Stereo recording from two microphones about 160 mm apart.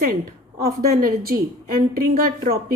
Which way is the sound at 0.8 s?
70° right (ahead or behind).